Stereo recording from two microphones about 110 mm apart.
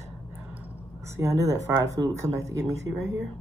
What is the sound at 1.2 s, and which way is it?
Speech, 30° right (ahead or behind).